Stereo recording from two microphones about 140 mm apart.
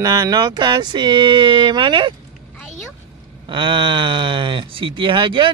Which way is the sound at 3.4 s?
35° right (ahead or behind).